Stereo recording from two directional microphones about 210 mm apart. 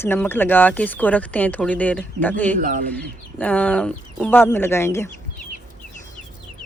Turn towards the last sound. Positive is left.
turn(degrees=10)  # may be behind; listen again after turning